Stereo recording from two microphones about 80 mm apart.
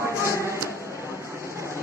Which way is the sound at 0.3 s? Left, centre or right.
Right.